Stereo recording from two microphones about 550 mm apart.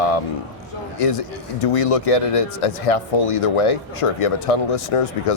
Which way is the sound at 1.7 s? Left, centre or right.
Left.